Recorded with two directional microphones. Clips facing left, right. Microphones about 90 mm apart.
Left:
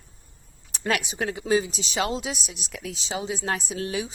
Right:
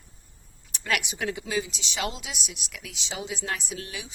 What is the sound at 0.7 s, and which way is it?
Speech, 35° left (ahead or behind).